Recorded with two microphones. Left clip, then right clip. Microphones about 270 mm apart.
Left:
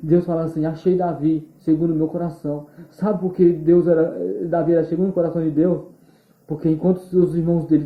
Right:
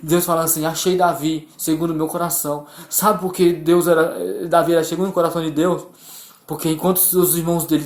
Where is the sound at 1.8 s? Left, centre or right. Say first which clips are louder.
Right 1 dB; right.